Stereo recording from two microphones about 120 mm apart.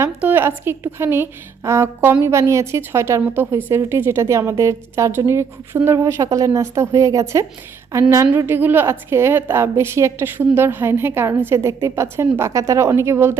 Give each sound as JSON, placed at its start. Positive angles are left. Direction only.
{"t": 0.0, "sound": "a woman's voice", "side_deg": -15}